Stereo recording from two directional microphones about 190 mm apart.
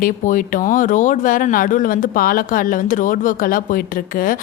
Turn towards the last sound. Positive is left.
turn(degrees=45)  # may be behind; listen again after turning